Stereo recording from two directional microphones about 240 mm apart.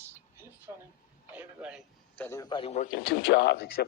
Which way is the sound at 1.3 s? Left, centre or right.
Centre.